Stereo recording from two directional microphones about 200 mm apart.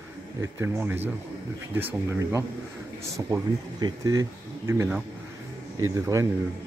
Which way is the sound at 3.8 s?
15° right (ahead or behind).